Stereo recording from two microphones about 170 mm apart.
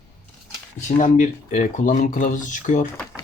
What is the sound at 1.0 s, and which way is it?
Speech, 50° left (ahead or behind).